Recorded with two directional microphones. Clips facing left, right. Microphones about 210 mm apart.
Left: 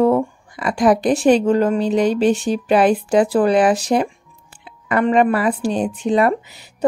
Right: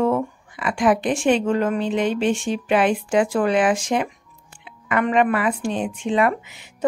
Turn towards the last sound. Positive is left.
turn(degrees=35)  # may be behind; listen again after turning